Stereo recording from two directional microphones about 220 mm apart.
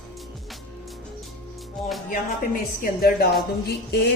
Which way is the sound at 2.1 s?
40° left (ahead or behind).